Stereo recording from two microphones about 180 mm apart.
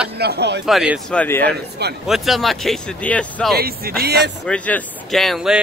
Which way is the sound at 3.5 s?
55° right (ahead or behind).